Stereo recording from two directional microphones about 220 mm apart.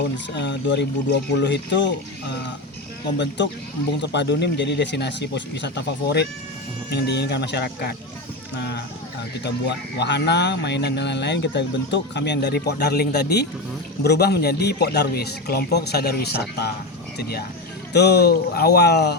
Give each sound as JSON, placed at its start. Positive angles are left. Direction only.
{"t": 0.3, "sound": "speech", "side_deg": 50}
{"t": 3.2, "sound": "speech", "side_deg": 55}